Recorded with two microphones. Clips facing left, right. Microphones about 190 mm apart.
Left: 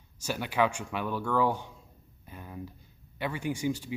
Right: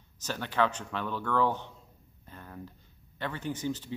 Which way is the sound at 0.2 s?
10° left (ahead or behind).